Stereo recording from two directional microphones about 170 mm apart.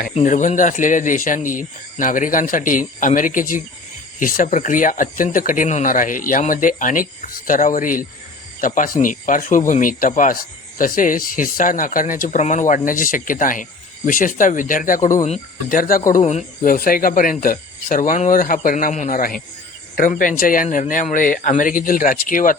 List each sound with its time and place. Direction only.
0.1 s speech: 45° left (ahead or behind)